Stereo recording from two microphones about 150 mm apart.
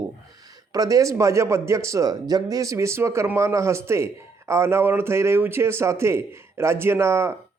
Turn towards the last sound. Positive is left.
turn(degrees=-15)  # may be behind; listen again after turning